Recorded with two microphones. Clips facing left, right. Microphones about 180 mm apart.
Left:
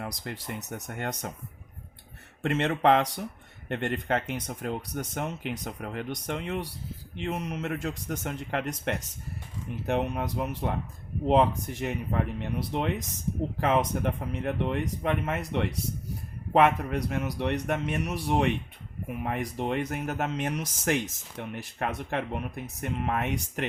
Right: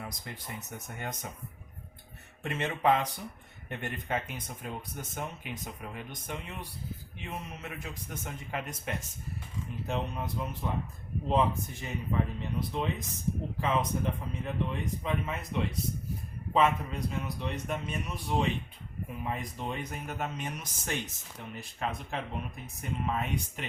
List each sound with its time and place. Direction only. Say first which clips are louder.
0.0 s speech: left 6 dB; 75° left (ahead or behind)
2.4 s speech: left 5 dB; 70° left (ahead or behind); by 21.0 s 90° left
21.5 s speech: left 3 dB; 70° left (ahead or behind)